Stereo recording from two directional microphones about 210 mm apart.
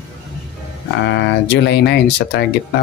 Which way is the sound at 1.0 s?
60° left (ahead or behind).